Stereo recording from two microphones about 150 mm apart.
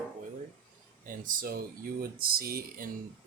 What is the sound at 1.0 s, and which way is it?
Speech, 65° right (ahead or behind).